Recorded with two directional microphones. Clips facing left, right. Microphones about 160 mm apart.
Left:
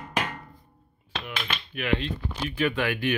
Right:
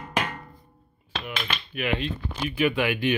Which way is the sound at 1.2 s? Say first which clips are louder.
Right 2 dB; 10° right (ahead or behind).